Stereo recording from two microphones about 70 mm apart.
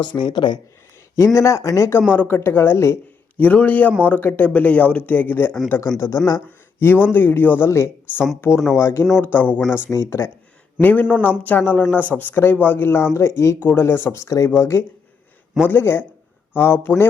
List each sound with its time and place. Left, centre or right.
0.0 s speech: left
1.1 s speech: left
2.1 s a woman's voice: left
3.3 s a woman's voice: left
6.0 s speech: left
6.7 s a woman's voice: left
9.2 s speech: left
9.9 s a woman's voice: left
10.8 s a woman's voice: left
13.7 s a woman's voice: left
14.1 s speech: left
14.6 s a woman's voice: left